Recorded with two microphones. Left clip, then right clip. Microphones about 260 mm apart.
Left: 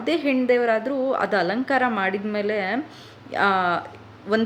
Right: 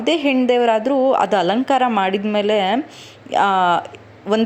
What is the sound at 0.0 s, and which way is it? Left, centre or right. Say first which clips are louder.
A man's voice: right 5 dB; right.